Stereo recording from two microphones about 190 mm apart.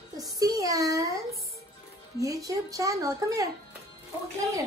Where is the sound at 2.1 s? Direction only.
20° right (ahead or behind).